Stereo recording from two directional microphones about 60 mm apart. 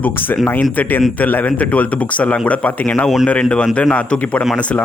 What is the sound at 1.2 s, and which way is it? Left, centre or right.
A man's voice, left.